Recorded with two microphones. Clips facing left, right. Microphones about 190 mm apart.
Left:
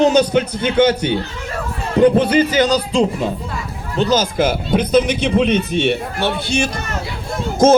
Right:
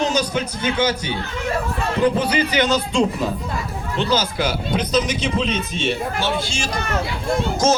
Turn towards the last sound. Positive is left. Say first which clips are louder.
# left 6 dB
turn(degrees=55)  # may be behind; listen again after turning